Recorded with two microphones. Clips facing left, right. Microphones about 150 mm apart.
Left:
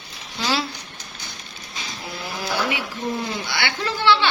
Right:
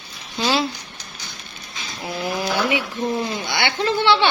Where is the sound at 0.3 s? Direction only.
20° right (ahead or behind).